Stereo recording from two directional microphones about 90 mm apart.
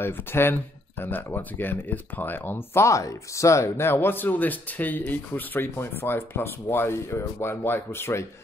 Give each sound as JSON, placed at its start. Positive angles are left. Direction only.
{"t": 0.0, "sound": "speech", "side_deg": 25}